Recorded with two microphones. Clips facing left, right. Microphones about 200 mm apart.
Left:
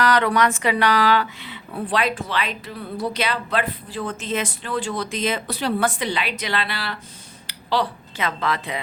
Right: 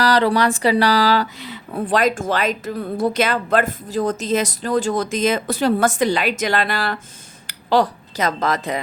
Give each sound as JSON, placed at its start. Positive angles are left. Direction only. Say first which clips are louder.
{"t": 0.0, "sound": "speech", "louder": "right 2 dB", "side_deg": -35}